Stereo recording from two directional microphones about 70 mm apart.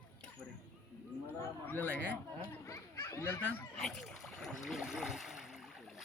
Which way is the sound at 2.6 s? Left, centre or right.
Left.